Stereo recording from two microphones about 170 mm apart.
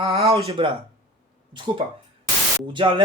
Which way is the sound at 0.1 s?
35° right (ahead or behind).